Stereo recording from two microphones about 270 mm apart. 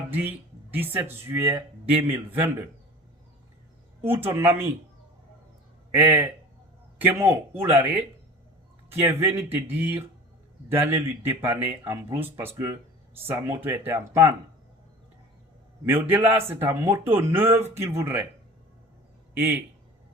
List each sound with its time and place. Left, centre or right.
0.2 s speech: centre
4.0 s speech: centre
5.9 s speech: centre
15.9 s speech: centre
19.3 s a man's voice: centre